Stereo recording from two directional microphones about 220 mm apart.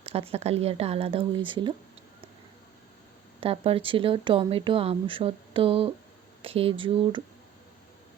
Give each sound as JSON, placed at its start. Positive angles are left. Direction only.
{"t": 0.0, "sound": "speech", "side_deg": -25}
{"t": 3.4, "sound": "speech", "side_deg": -25}